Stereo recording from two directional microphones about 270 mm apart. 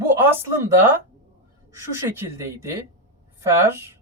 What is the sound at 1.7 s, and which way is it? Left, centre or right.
Speech, centre.